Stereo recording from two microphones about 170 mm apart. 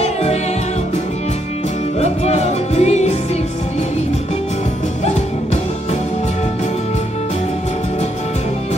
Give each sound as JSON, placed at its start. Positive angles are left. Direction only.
{"t": 0.0, "sound": "music", "side_deg": 40}
{"t": 2.0, "sound": "music", "side_deg": 40}